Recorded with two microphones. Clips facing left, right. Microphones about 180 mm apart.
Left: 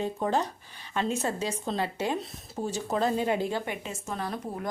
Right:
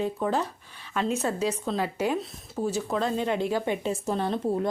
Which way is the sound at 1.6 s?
5° right (ahead or behind).